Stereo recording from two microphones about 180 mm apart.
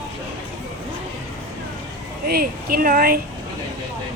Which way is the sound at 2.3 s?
55° right (ahead or behind).